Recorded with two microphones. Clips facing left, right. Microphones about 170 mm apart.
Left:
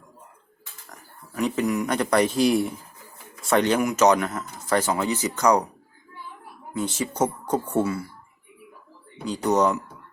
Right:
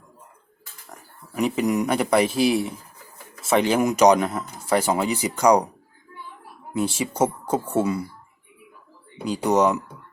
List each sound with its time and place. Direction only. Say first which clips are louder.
1.5 s speech: right 2 dB; 20° right (ahead or behind)
1.9 s speech: right 1 dB; 10° right (ahead or behind)
3.8 s speech: right 3 dB; 20° right (ahead or behind)
6.7 s speech: right 2 dB; 10° right (ahead or behind)
9.2 s speech: right 2 dB; 10° right (ahead or behind)